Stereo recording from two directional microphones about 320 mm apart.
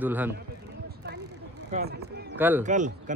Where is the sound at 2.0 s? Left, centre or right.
Right.